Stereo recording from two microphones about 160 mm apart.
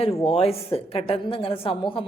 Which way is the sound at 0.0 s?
35° left (ahead or behind).